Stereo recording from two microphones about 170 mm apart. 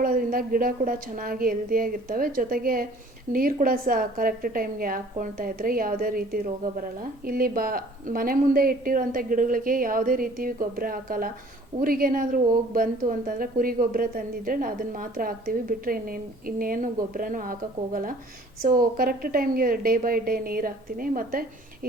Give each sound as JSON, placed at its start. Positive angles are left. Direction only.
{"t": 0.0, "sound": "a woman's voice", "side_deg": -55}